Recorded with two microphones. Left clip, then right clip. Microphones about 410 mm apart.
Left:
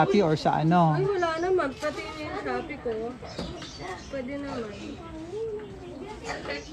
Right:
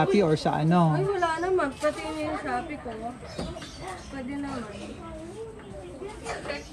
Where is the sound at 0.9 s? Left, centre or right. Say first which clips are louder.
Even; centre.